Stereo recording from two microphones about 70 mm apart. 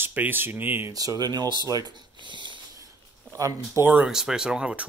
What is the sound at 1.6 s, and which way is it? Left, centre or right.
Speech, right.